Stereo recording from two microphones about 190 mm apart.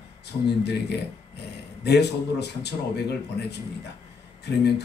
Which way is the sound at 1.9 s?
60° left (ahead or behind).